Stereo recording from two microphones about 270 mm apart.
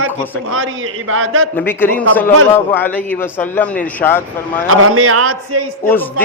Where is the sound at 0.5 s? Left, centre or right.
Right.